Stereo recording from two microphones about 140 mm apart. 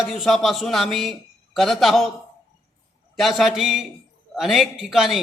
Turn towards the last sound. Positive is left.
turn(degrees=-5)  # may be behind; listen again after turning